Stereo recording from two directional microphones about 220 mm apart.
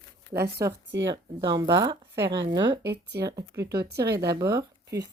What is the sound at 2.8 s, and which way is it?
Speech, 50° right (ahead or behind).